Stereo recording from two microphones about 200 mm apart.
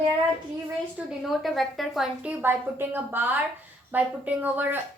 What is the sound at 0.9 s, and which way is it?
A woman's voice, centre (ahead or behind).